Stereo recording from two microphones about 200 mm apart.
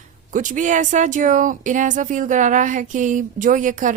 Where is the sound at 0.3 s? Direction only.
40° right (ahead or behind).